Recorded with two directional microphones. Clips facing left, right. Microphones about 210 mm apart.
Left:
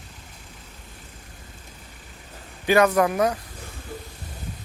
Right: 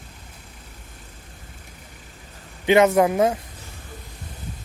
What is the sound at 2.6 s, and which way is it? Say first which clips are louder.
Speech: right 3 dB; 25° right (ahead or behind).